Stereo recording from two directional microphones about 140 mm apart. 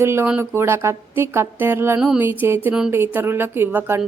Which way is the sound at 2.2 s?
15° right (ahead or behind).